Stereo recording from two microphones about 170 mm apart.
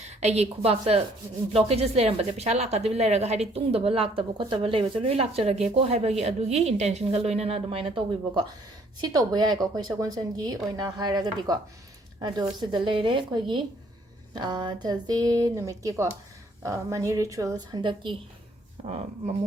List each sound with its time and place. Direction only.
0.0 s a woman's voice: 40° right (ahead or behind)